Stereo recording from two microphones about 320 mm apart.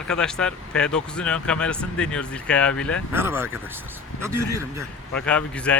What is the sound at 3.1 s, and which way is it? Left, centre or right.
Speech, centre.